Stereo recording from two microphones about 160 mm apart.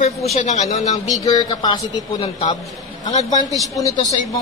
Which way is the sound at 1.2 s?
25° left (ahead or behind).